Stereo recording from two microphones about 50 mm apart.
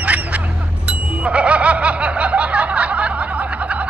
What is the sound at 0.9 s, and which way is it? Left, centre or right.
Snicker, right.